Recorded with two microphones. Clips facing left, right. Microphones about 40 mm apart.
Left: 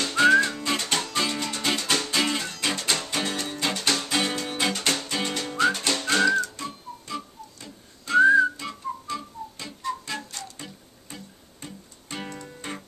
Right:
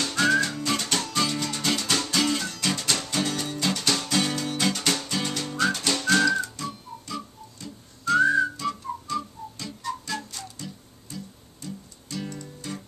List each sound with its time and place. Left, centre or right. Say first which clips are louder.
0.0 s music: left 4 dB; centre
6.5 s whistling: right 1 dB; centre
10.6 s music: right 2 dB; left